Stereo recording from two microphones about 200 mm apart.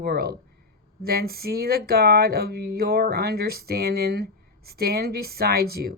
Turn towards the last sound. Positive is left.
turn(degrees=-50)  # may be behind; listen again after turning